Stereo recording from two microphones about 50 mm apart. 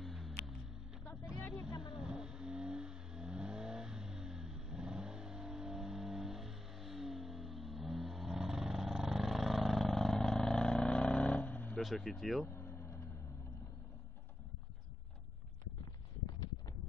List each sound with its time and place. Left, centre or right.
0.0 s music: centre
1.5 s vehicle: centre; by 11.7 s left
11.8 s speech: centre
12.4 s vehicle: left